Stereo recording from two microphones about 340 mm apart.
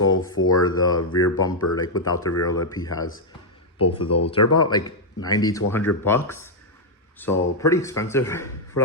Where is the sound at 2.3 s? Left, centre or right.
Left.